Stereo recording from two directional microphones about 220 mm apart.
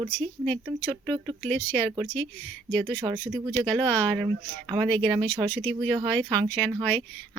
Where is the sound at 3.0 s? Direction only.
20° right (ahead or behind).